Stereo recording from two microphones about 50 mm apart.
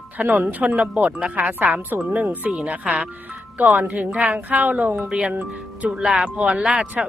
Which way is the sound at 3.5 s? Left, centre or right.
Right.